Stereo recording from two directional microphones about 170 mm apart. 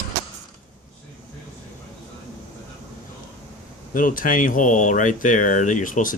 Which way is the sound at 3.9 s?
55° left (ahead or behind).